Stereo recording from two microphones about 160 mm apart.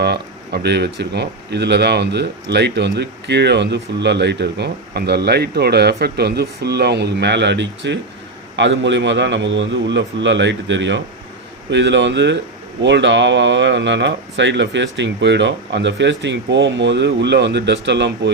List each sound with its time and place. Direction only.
0.0 s a man's voice: 90° right